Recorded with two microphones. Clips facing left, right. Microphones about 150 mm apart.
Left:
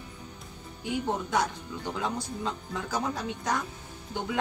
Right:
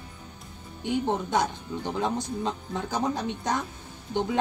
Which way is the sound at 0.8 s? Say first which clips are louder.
Right 4 dB; 20° right (ahead or behind).